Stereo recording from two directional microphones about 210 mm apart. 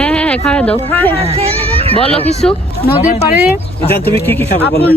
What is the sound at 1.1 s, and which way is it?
Speech, 30° right (ahead or behind).